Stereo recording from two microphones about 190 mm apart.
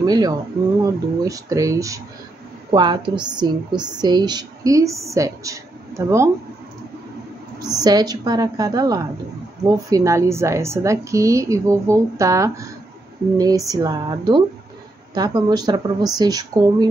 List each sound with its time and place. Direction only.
0.0 s a woman's voice: 20° right (ahead or behind)
7.5 s a woman's voice: 20° right (ahead or behind)